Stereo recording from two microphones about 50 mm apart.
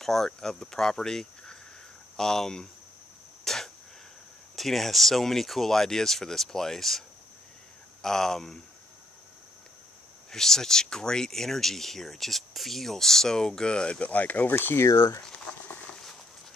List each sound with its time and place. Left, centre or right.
0.0 s speech: centre
3.4 s a sound: centre
4.6 s speech: centre
8.0 s speech: centre
10.3 s speech: centre; by 14.5 s left
14.5 s speech: left